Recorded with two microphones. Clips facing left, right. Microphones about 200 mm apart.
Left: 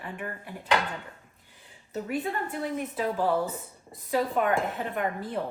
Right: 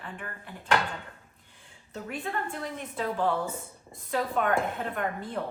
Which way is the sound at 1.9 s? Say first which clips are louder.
Left 4 dB; 5° left (ahead or behind).